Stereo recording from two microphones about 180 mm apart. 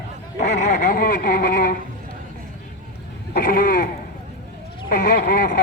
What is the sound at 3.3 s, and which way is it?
Speech, 55° left (ahead or behind).